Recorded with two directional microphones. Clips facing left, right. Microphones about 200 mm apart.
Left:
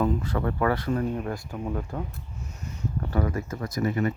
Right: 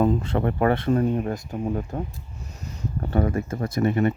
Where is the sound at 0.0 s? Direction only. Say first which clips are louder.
Right 4 dB; 25° right (ahead or behind).